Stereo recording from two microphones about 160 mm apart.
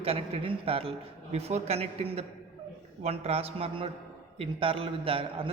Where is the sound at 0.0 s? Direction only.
35° right (ahead or behind).